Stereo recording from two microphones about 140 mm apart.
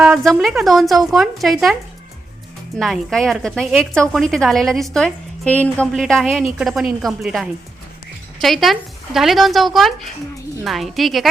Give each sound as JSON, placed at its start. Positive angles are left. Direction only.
{"t": 0.0, "sound": "a woman's voice", "side_deg": 0}
{"t": 2.7, "sound": "a woman's voice", "side_deg": 0}